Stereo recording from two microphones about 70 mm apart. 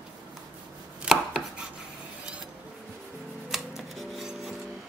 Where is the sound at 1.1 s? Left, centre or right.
Centre.